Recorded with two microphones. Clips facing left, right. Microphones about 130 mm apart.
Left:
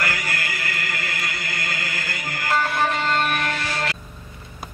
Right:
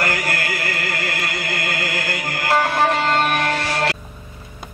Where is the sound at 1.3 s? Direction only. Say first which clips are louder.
Right 5 dB; 70° right (ahead or behind).